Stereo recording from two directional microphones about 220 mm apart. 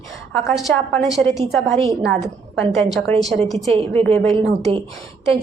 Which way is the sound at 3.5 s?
30° right (ahead or behind).